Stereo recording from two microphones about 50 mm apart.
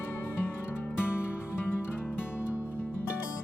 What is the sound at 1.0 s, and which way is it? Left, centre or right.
Music, left.